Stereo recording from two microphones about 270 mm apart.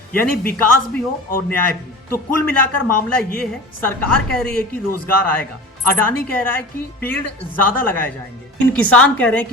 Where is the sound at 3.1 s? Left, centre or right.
Centre.